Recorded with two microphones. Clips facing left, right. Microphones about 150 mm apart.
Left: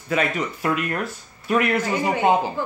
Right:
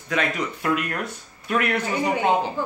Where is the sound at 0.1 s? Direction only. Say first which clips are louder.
Left 2 dB; 5° left (ahead or behind).